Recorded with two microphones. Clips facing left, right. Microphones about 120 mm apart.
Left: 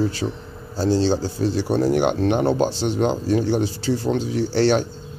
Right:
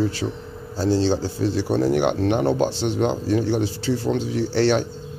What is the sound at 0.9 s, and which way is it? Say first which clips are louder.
Speech: left 1 dB; 40° left (ahead or behind).